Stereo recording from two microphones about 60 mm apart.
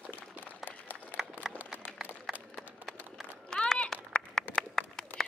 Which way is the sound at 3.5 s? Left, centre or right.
Centre.